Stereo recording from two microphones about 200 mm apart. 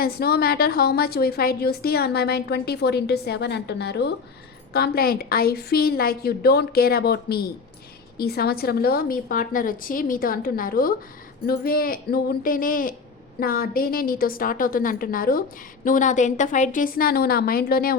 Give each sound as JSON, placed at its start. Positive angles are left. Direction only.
{"t": 0.0, "sound": "a woman's voice", "side_deg": 50}